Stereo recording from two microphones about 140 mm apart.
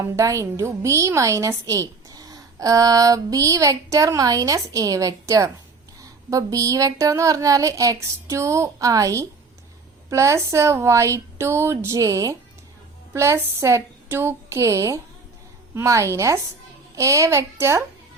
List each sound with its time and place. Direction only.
0.0 s a woman's voice: 20° right (ahead or behind)